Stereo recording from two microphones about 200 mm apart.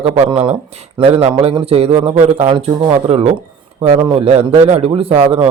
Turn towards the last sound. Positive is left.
turn(degrees=-30)  # may be behind; listen again after turning